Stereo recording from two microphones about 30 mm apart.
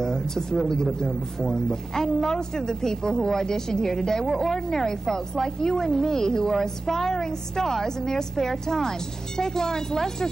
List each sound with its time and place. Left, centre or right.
0.0 s a woman's voice: centre
2.2 s a woman's voice: centre